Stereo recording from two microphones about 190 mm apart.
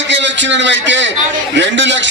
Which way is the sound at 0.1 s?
70° right (ahead or behind).